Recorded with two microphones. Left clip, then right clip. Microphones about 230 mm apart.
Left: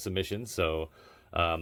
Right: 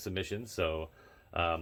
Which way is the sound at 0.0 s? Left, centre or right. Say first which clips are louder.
Left 4 dB; left.